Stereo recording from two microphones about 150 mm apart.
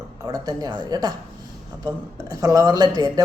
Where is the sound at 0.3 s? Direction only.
25° right (ahead or behind).